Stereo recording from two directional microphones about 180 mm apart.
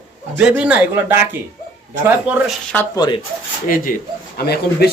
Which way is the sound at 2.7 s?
20° left (ahead or behind).